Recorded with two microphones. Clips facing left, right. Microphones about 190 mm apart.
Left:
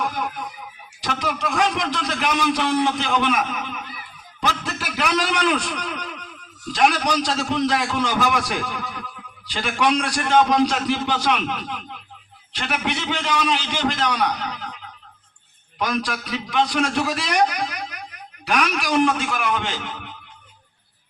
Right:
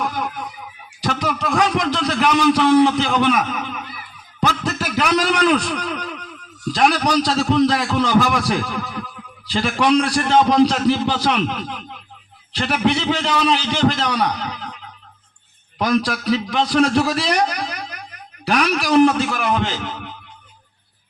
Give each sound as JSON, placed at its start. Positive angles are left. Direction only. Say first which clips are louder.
{"t": 1.0, "sound": "a man's voice", "louder": "right 3 dB", "side_deg": -35}
{"t": 12.5, "sound": "a man's voice", "louder": "right 7 dB", "side_deg": -35}
{"t": 15.8, "sound": "a man's voice", "louder": "right 6 dB", "side_deg": -35}